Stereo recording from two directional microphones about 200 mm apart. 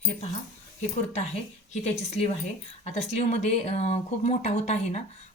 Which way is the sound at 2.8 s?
35° left (ahead or behind).